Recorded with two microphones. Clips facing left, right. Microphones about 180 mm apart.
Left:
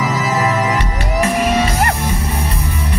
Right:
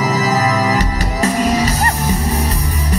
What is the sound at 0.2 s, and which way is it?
Music, 40° right (ahead or behind).